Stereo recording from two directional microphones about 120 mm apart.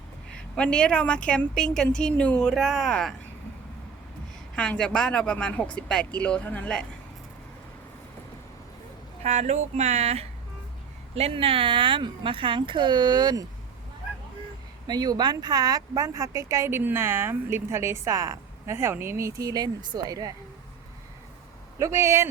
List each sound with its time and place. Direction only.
0.3 s a woman's voice: 5° left (ahead or behind)
4.5 s a woman's voice: 10° left (ahead or behind)
9.2 s speech: 70° right (ahead or behind); by 13.4 s 35° right (ahead or behind)
14.8 s speech: 35° right (ahead or behind)
21.8 s speech: 25° right (ahead or behind)